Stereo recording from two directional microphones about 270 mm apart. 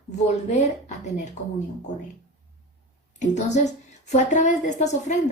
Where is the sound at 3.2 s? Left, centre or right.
Left.